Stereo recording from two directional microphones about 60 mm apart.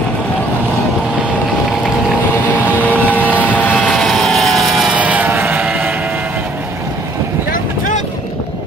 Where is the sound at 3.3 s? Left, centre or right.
Right.